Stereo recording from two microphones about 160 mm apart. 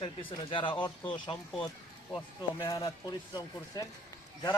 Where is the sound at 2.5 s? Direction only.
20° left (ahead or behind).